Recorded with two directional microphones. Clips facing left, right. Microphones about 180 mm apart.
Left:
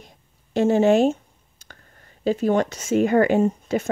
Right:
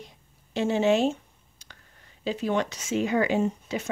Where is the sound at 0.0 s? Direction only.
50° left (ahead or behind).